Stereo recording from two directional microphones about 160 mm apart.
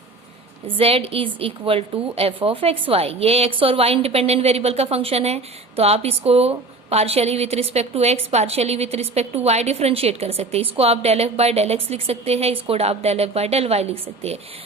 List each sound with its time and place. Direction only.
0.8 s a woman's voice: 35° right (ahead or behind)